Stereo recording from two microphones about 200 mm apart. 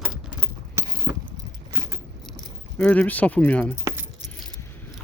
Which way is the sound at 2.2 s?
5° left (ahead or behind).